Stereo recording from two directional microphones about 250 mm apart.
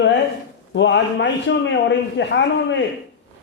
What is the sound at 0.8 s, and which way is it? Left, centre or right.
A man's voice, left.